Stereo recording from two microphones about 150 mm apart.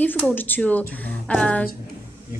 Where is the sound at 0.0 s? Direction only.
10° left (ahead or behind).